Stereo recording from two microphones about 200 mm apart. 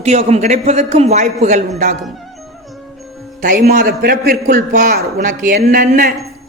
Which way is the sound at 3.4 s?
40° right (ahead or behind).